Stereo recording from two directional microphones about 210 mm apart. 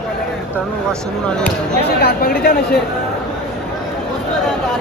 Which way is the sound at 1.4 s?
50° left (ahead or behind).